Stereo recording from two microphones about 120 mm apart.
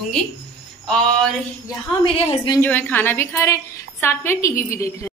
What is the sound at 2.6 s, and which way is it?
A woman's voice, 15° left (ahead or behind).